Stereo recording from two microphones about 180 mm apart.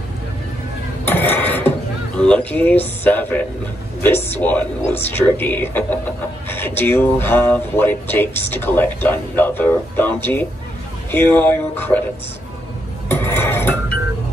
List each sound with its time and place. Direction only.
1.0 s a sound: 10° left (ahead or behind)
2.1 s speech: 5° left (ahead or behind)
13.1 s dishes: 10° left (ahead or behind)